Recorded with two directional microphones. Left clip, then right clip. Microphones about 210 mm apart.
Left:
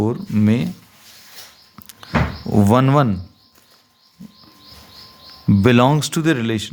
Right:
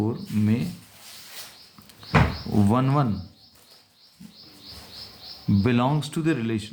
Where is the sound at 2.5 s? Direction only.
50° left (ahead or behind).